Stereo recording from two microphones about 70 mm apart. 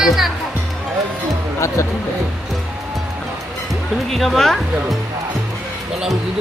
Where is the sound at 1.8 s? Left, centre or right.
Left.